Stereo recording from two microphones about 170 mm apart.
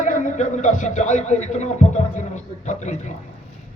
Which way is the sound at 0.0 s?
45° left (ahead or behind).